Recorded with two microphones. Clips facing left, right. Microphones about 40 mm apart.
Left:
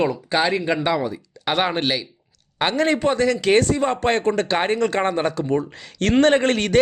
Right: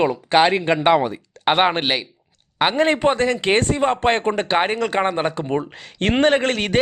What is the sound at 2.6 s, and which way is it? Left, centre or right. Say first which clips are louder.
Speech: right 2 dB; centre.